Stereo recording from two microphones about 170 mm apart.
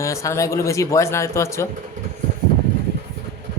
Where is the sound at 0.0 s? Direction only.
20° left (ahead or behind).